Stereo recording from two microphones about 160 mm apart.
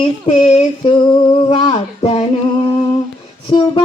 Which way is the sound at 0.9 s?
30° left (ahead or behind).